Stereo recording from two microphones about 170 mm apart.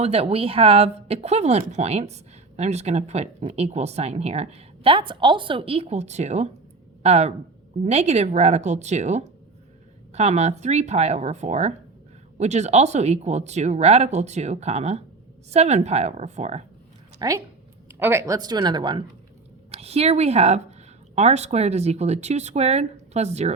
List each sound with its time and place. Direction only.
0.0 s a woman's voice: 35° right (ahead or behind)
17.2 s speech: 20° right (ahead or behind)
19.7 s speech: 35° right (ahead or behind)